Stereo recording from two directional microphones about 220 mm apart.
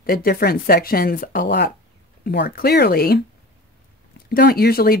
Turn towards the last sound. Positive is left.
turn(degrees=45)  # may be behind; listen again after turning